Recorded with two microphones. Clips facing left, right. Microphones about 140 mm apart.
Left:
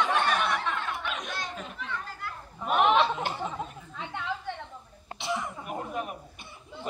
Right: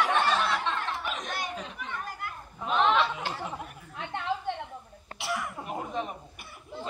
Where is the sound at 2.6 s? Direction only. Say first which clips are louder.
Left 2 dB; 15° left (ahead or behind).